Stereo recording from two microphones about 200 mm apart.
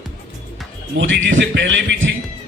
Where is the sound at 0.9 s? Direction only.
70° right (ahead or behind).